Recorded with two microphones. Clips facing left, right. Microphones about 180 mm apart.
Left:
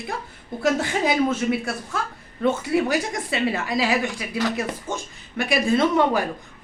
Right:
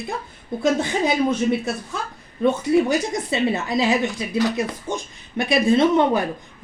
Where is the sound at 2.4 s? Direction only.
20° right (ahead or behind).